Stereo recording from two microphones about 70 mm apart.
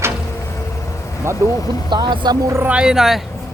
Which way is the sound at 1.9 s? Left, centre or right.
Right.